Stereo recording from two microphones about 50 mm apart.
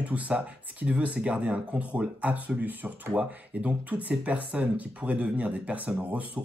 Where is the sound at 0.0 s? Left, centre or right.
Right.